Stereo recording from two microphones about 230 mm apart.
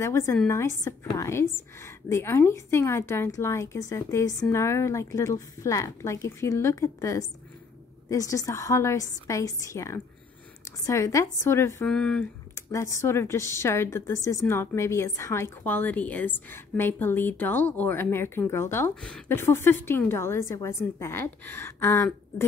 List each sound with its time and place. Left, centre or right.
0.0 s speech: centre